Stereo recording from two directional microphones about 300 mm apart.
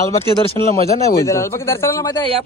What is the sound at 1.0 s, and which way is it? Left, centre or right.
Speech, centre.